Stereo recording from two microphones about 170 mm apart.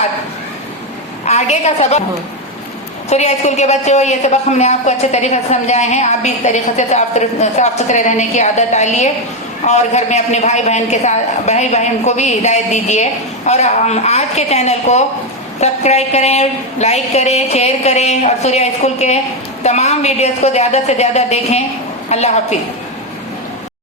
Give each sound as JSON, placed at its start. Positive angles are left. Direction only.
{"t": 1.2, "sound": "a woman's voice", "side_deg": 40}
{"t": 3.1, "sound": "a woman's voice", "side_deg": 40}